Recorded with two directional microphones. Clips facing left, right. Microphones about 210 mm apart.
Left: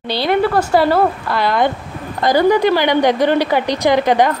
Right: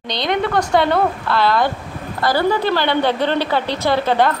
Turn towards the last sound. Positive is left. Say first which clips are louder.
# left 3 dB
turn(degrees=15)  # may be behind; listen again after turning